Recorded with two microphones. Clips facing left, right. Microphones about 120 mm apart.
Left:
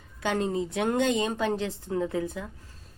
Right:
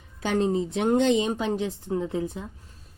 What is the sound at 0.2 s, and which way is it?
Speech, 25° right (ahead or behind).